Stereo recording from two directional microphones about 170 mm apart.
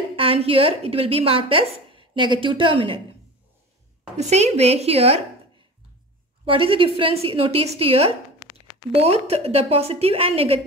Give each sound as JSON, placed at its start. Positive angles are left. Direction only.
{"t": 0.1, "sound": "a woman's voice", "side_deg": -35}
{"t": 4.3, "sound": "a woman's voice", "side_deg": -40}
{"t": 6.4, "sound": "a woman's voice", "side_deg": -30}